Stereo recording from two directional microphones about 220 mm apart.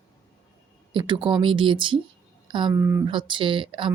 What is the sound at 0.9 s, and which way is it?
A woman's voice, 20° right (ahead or behind).